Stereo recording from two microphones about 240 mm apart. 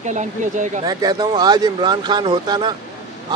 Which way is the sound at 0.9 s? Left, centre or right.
Centre.